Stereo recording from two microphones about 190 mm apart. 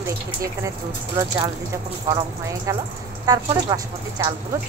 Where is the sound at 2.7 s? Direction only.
15° right (ahead or behind).